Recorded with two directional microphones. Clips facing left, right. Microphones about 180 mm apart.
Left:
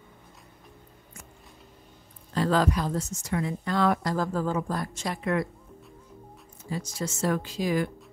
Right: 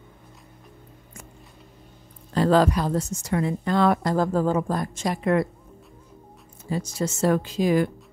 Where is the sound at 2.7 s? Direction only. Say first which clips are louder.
Right 4 dB; 65° right (ahead or behind).